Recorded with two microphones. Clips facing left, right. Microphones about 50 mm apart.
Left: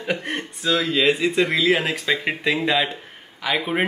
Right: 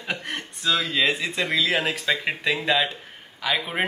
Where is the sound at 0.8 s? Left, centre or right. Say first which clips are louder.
Left 4 dB; left.